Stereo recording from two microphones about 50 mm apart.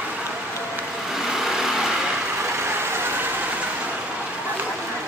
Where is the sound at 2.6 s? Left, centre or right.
Right.